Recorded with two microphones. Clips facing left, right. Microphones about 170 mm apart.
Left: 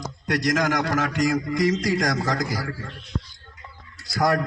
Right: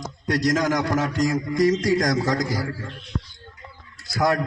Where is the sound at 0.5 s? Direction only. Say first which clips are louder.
Right 1 dB; 75° left (ahead or behind).